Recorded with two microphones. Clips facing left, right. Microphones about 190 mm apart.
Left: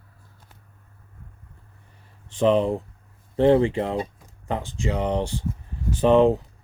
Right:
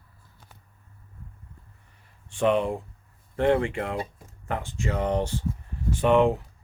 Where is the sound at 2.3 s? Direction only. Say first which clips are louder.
Left 4 dB; 35° left (ahead or behind).